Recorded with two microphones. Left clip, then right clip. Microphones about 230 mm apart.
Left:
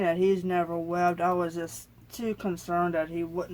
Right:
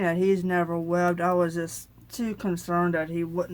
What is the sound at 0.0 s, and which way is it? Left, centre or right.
Speech, right.